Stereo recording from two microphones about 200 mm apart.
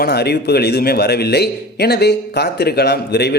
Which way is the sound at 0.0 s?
55° left (ahead or behind).